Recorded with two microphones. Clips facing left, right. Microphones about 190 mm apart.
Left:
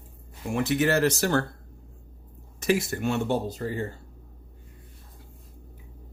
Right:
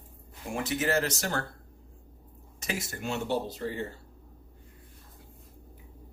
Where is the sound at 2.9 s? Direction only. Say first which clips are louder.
Left 6 dB; 60° left (ahead or behind).